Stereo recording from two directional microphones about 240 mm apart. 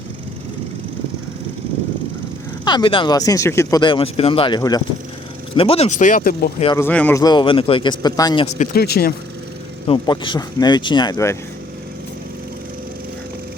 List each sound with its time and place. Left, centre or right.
2.6 s speech: centre; by 6.5 s left
6.7 s speech: centre
8.5 s speech: left
9.8 s speech: left